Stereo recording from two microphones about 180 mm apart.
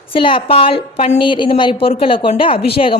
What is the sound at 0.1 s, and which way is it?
A woman's voice, 30° left (ahead or behind).